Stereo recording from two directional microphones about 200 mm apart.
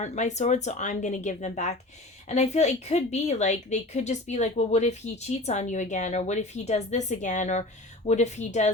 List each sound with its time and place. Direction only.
0.0 s a woman's voice: 35° left (ahead or behind)